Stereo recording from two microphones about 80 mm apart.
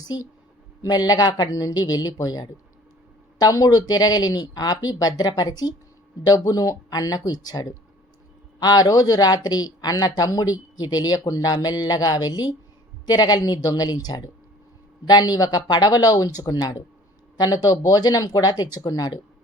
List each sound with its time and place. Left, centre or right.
0.9 s speech: left